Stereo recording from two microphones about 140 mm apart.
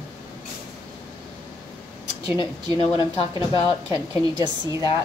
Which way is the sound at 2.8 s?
40° left (ahead or behind).